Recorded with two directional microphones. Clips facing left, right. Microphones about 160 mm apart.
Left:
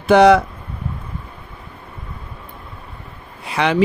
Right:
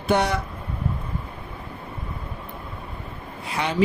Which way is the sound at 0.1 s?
90° left.